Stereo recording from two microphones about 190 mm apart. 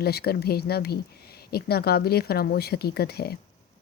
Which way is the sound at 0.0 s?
55° left (ahead or behind).